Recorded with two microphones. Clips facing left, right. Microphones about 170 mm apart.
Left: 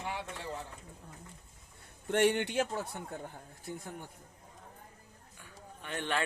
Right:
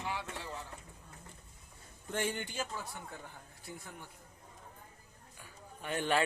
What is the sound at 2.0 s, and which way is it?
Speech, 70° left (ahead or behind).